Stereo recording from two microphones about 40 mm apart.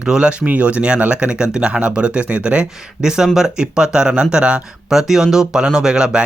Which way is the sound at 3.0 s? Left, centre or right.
Centre.